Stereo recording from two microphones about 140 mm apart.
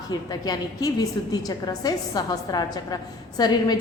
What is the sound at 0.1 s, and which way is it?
A woman's voice, 30° left (ahead or behind).